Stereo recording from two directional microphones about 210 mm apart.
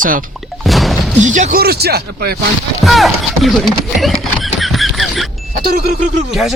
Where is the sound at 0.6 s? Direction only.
Centre (ahead or behind).